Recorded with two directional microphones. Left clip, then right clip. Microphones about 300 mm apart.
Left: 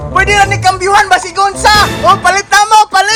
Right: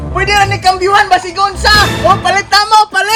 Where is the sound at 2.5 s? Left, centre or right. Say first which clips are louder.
Left 2 dB; centre.